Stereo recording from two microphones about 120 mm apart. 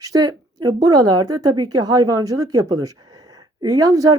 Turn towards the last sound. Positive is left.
turn(degrees=-30)  # may be behind; listen again after turning